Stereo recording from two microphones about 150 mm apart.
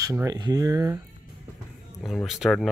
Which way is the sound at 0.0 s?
20° right (ahead or behind).